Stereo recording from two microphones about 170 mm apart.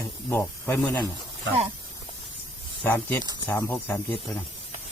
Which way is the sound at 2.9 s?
10° left (ahead or behind).